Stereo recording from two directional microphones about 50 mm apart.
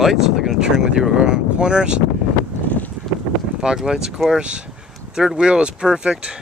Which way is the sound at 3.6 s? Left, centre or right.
Centre.